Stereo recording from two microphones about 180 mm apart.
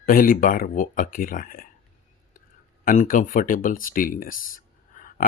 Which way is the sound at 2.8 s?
45° left (ahead or behind).